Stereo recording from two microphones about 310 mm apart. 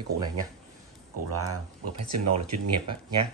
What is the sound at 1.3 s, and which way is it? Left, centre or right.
Speech, right.